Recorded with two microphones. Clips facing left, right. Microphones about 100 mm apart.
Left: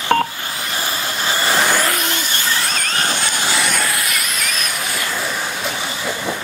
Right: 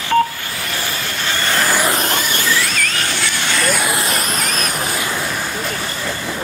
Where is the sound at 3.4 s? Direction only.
5° left (ahead or behind).